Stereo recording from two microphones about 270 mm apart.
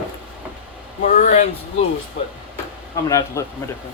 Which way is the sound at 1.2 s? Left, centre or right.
Left.